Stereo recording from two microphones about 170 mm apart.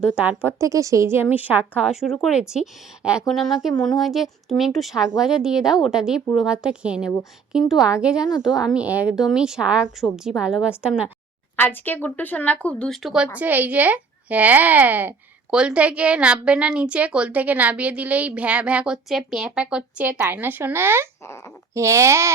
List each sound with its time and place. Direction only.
0.2 s a woman's voice: 10° right (ahead or behind)
11.5 s speech: 10° left (ahead or behind); by 21.1 s 15° right (ahead or behind)
21.2 s speech: 15° left (ahead or behind)
21.8 s speech: 15° right (ahead or behind)